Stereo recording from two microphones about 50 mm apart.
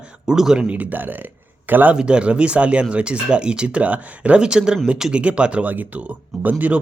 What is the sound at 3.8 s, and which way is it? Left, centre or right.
Speech, right.